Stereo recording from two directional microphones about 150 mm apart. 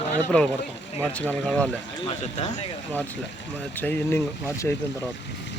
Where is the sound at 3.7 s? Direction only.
10° left (ahead or behind).